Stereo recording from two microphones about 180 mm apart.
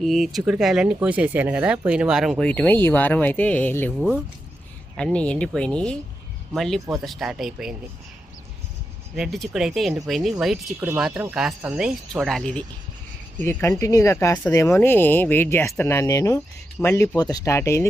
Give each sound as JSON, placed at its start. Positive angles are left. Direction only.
{"t": 0.0, "sound": "speech", "side_deg": 0}
{"t": 4.9, "sound": "speech", "side_deg": 5}
{"t": 9.1, "sound": "speech", "side_deg": 0}